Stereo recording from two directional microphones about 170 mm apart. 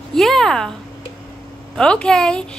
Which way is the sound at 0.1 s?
Centre (ahead or behind).